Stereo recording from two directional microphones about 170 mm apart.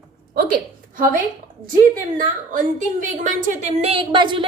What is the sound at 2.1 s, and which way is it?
A woman's voice, 50° right (ahead or behind).